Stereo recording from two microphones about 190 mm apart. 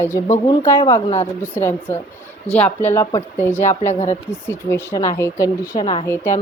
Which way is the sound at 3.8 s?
40° left (ahead or behind).